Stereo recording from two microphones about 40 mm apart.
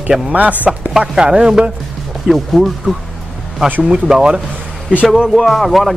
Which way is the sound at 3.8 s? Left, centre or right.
Centre.